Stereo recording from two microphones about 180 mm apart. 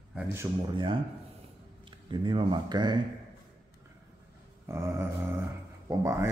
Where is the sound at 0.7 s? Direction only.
30° right (ahead or behind).